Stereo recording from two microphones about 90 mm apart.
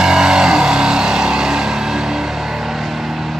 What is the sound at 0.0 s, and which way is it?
Vehicle, 5° right (ahead or behind).